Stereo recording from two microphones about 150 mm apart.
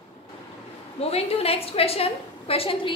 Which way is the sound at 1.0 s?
45° left (ahead or behind).